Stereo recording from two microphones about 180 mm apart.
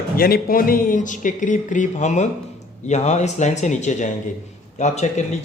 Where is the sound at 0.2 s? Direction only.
55° left (ahead or behind).